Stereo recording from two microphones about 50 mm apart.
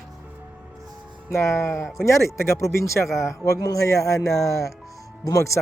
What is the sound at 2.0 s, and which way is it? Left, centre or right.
Speech, left.